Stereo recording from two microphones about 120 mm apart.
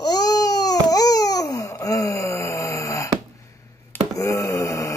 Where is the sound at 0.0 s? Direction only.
35° left (ahead or behind).